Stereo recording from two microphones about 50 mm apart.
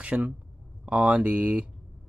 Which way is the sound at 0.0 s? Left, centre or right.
Right.